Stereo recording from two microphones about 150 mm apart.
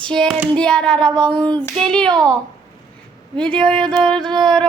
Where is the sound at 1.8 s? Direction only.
5° left (ahead or behind).